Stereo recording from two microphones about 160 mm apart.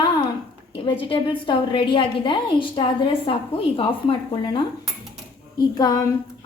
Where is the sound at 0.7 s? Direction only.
35° left (ahead or behind).